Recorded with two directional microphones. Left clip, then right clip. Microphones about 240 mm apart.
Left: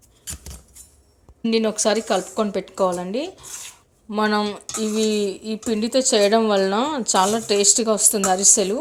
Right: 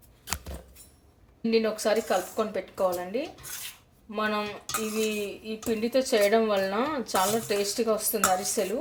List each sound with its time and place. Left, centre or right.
1.5 s speech: left